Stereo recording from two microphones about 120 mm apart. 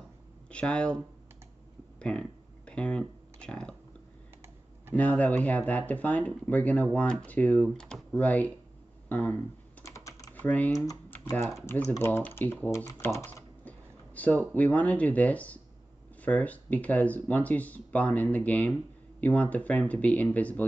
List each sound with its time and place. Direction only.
0.5 s speech: 10° left (ahead or behind)
2.0 s a sound: 10° left (ahead or behind)
4.9 s speech: 10° left (ahead or behind)
9.1 s a sound: 10° left (ahead or behind)
9.8 s typing: 25° left (ahead or behind)
10.3 s speech: 15° left (ahead or behind)
11.1 s typing: 15° left (ahead or behind)
11.9 s speech: 20° left (ahead or behind)
13.0 s typing: 20° left (ahead or behind)
14.5 s speech: 10° left (ahead or behind)